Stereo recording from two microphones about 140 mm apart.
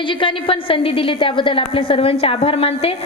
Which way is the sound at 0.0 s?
35° left (ahead or behind).